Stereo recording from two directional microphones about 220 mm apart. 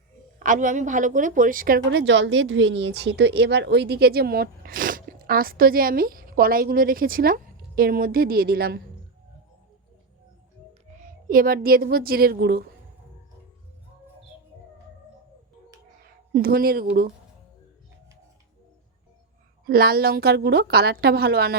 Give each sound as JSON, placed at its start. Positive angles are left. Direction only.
{"t": 0.3, "sound": "a woman's voice", "side_deg": -35}
{"t": 11.3, "sound": "a woman's voice", "side_deg": -40}
{"t": 16.3, "sound": "a woman's voice", "side_deg": -40}
{"t": 19.6, "sound": "a woman's voice", "side_deg": -45}